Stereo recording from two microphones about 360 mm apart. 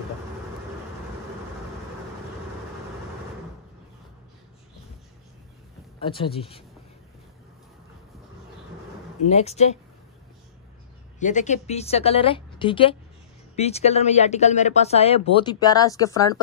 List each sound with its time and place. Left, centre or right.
5.9 s speech: centre
9.2 s speech: centre
11.1 s speech: centre